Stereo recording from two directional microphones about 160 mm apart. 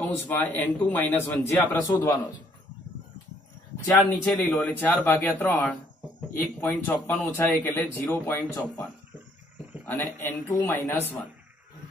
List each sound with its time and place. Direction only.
0.2 s speech: 10° left (ahead or behind)
3.7 s speech: 15° left (ahead or behind)
9.8 s speech: 15° left (ahead or behind)